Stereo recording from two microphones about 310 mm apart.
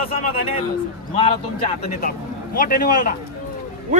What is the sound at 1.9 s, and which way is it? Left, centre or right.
Speech, left.